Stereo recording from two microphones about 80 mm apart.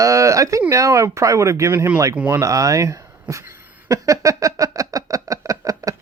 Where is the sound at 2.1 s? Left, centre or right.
Right.